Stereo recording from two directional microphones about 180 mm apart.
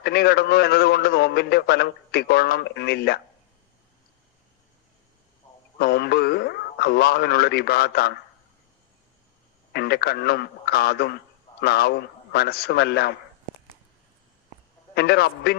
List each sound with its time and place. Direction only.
0.0 s a man's voice: 65° left (ahead or behind)
5.8 s speech: 65° left (ahead or behind)
9.7 s a man's voice: 65° left (ahead or behind)
14.9 s a man's voice: 65° left (ahead or behind)